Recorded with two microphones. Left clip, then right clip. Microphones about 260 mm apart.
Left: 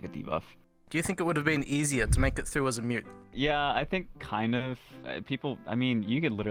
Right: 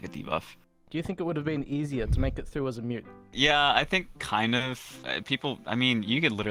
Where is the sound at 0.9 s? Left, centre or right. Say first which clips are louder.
Left 2 dB; left.